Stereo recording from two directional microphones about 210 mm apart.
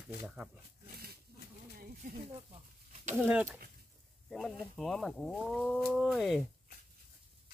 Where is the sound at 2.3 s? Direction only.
30° right (ahead or behind).